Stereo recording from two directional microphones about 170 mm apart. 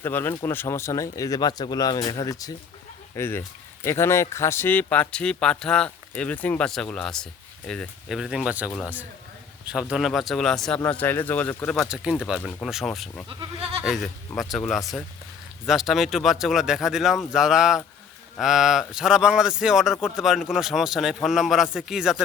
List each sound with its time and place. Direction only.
0.0 s speech: 10° left (ahead or behind)
13.4 s goat: 35° right (ahead or behind)
13.8 s speech: centre (ahead or behind)